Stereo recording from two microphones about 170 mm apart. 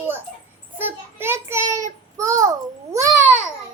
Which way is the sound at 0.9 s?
15° right (ahead or behind).